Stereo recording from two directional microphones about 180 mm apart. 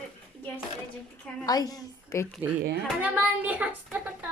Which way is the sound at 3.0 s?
10° right (ahead or behind).